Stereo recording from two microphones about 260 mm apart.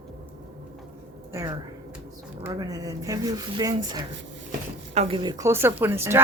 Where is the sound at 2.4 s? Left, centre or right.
Centre.